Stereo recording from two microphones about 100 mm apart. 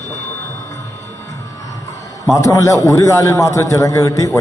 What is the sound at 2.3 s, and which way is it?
A man's voice, 30° left (ahead or behind).